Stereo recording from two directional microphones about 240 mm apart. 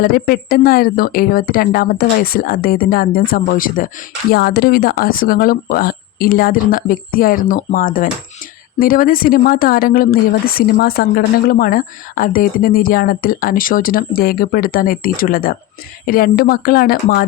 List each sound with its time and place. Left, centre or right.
0.0 s speech: left